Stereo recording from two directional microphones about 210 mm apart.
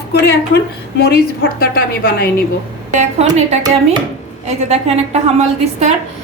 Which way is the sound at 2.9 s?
35° right (ahead or behind).